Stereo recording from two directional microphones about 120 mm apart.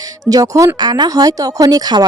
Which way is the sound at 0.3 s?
30° right (ahead or behind).